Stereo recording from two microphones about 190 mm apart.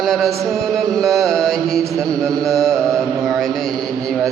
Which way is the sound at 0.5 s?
Centre (ahead or behind).